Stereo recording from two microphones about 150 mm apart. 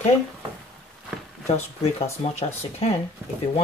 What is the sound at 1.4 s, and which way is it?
Speech, 45° left (ahead or behind).